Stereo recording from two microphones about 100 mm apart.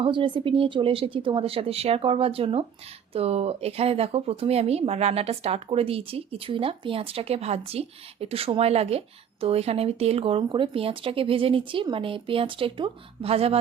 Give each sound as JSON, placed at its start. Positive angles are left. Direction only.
{"t": 0.0, "sound": "speech", "side_deg": -55}
{"t": 3.1, "sound": "speech", "side_deg": -90}